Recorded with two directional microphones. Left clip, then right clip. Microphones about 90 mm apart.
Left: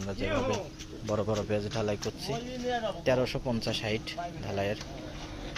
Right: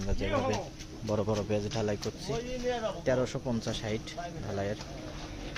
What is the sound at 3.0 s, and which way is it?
Speech, 10° right (ahead or behind).